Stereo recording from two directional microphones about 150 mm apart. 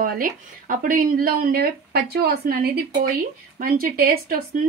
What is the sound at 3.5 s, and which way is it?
Dishes, 75° right (ahead or behind).